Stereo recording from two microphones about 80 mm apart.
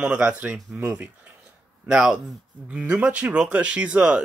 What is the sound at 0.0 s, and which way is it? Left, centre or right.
Speech, centre.